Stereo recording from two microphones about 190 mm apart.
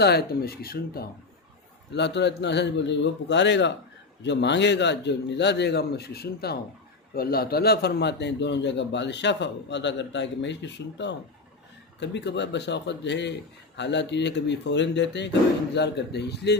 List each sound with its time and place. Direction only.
0.0 s speech: 55° left (ahead or behind)
1.9 s a man's voice: 65° left (ahead or behind)